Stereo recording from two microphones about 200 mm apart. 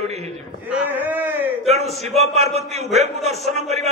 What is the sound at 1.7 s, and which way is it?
A man's voice, 35° right (ahead or behind).